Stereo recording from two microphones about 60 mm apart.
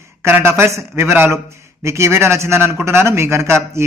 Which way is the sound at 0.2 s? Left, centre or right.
Right.